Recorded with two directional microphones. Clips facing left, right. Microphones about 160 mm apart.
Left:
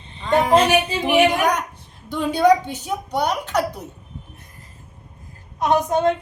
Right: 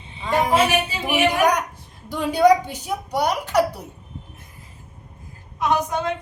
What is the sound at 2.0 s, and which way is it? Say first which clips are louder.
A woman's voice: even; 10° right (ahead or behind).